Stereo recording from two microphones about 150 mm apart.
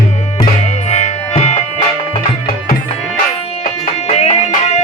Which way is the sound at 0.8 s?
50° left (ahead or behind).